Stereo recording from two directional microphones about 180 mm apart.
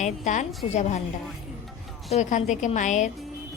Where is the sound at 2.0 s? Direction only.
40° left (ahead or behind).